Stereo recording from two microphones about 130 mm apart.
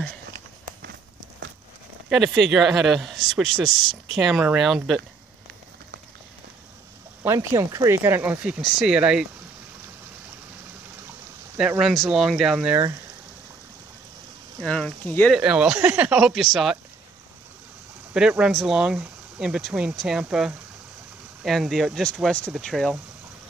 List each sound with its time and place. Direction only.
2.0 s speech: centre (ahead or behind)
7.2 s speech: 25° right (ahead or behind); by 9.3 s 5° right (ahead or behind)
11.8 s speech: centre (ahead or behind)
14.6 s speech: 5° left (ahead or behind)
15.3 s speech: 5° right (ahead or behind)
18.1 s speech: 5° right (ahead or behind)